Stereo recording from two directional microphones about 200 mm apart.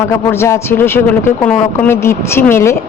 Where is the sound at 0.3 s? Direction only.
15° left (ahead or behind).